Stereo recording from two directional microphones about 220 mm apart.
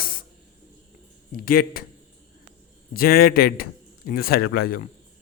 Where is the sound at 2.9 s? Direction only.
40° left (ahead or behind).